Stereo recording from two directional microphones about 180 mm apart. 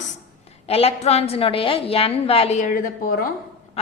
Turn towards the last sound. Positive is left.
turn(degrees=55)  # may be behind; listen again after turning